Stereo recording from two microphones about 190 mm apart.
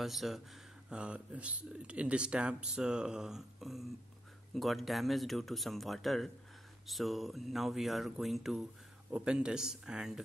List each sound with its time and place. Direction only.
0.0 s speech: centre (ahead or behind)